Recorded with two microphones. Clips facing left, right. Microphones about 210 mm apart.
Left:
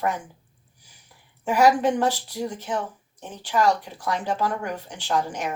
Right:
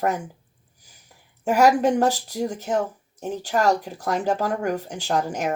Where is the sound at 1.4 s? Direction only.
45° right (ahead or behind).